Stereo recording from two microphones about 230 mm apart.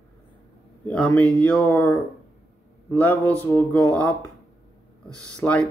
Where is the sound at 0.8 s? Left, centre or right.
Centre.